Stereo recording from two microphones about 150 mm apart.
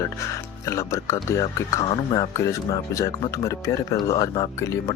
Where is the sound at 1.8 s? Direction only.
30° left (ahead or behind).